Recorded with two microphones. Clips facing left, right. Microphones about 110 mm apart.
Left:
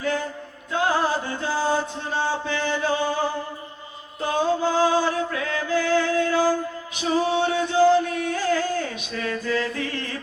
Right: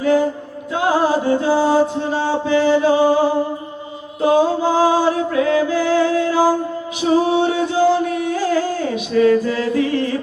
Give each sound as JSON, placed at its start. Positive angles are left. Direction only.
{"t": 0.7, "sound": "music", "side_deg": -20}
{"t": 1.5, "sound": "music", "side_deg": -90}
{"t": 2.6, "sound": "music", "side_deg": -20}
{"t": 4.4, "sound": "music", "side_deg": -15}
{"t": 9.5, "sound": "singing", "side_deg": -20}